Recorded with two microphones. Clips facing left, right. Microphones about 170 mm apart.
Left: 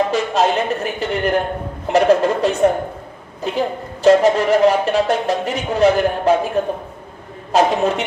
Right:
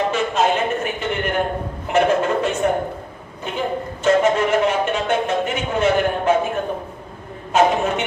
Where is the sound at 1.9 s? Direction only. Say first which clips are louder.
Left 4 dB; 35° left (ahead or behind).